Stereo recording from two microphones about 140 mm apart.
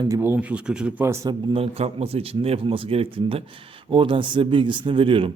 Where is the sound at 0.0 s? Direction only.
20° right (ahead or behind).